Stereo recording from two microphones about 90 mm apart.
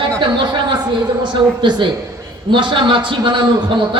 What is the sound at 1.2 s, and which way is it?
A man's voice, 55° right (ahead or behind).